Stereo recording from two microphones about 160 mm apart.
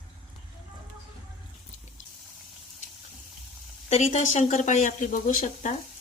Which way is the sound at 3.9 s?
45° left (ahead or behind).